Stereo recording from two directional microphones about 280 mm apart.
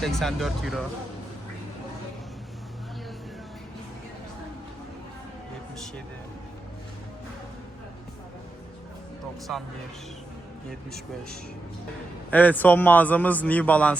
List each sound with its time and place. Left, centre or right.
0.0 s a man's voice: centre
9.5 s a man's voice: centre
10.7 s a man's voice: centre